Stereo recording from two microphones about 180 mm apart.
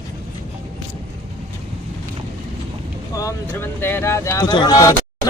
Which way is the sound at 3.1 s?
15° left (ahead or behind).